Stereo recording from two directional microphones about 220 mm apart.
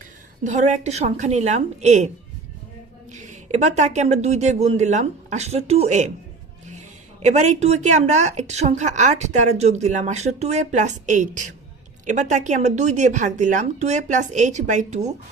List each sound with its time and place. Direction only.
0.4 s speech: 30° right (ahead or behind)
3.1 s speech: 30° right (ahead or behind)